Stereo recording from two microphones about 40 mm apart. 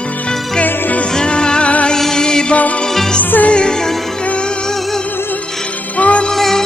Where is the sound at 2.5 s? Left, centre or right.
Left.